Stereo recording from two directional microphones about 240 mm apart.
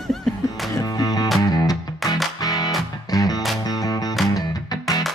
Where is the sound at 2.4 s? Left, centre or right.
Centre.